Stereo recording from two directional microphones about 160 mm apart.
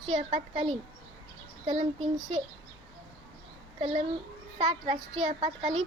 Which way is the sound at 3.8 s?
40° right (ahead or behind).